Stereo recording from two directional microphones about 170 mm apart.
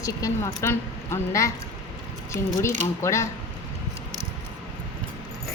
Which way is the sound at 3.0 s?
15° left (ahead or behind).